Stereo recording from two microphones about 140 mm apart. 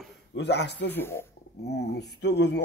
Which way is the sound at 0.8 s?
15° left (ahead or behind).